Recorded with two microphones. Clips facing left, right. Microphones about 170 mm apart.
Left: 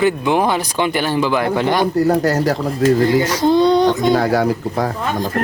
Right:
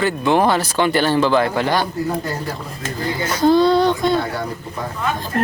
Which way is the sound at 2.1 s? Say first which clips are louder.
Left 9 dB; 80° left.